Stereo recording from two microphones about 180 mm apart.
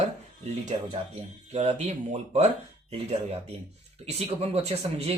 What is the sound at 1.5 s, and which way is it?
Speech, 40° right (ahead or behind).